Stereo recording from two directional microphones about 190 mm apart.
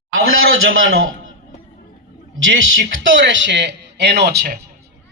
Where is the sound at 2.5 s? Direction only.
85° right; by 4.5 s 60° right (ahead or behind).